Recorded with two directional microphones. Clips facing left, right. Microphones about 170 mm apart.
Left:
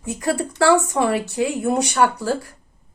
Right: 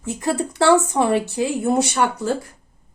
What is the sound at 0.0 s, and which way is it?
A woman's voice, 25° right (ahead or behind).